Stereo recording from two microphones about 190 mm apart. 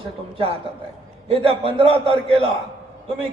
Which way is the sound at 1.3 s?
30° right (ahead or behind).